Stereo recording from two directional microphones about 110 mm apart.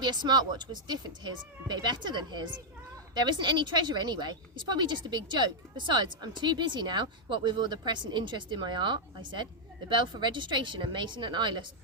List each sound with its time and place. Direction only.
0.0 s a woman's voice: 40° right (ahead or behind)